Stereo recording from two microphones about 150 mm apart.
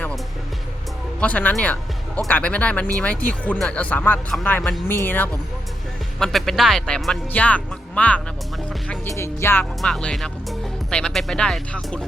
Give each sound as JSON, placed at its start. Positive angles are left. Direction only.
{"t": 1.2, "sound": "speech", "side_deg": 10}
{"t": 9.8, "sound": "speech", "side_deg": 5}